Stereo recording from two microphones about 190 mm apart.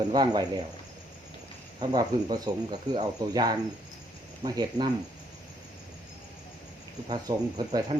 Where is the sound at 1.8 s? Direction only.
20° right (ahead or behind).